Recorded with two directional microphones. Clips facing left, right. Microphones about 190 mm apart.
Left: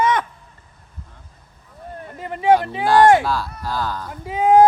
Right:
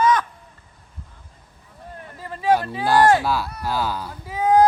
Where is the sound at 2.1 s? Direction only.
20° left (ahead or behind).